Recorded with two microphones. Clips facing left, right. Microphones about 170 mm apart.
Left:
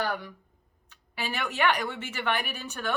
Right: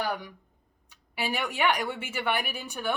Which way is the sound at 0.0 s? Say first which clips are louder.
Even; 15° right (ahead or behind).